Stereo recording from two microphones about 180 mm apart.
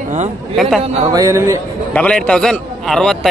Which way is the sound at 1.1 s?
20° right (ahead or behind).